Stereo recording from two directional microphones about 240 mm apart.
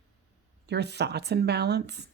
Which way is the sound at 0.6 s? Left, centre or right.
Right.